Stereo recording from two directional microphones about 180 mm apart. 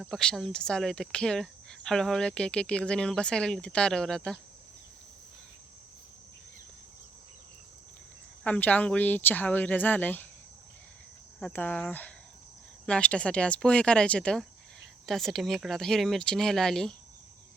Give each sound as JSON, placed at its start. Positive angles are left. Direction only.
{"t": 0.0, "sound": "speech", "side_deg": 0}
{"t": 8.4, "sound": "speech", "side_deg": 10}
{"t": 11.3, "sound": "speech", "side_deg": 5}